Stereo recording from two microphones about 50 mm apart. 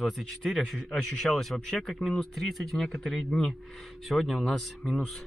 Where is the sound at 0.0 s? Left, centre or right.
Centre.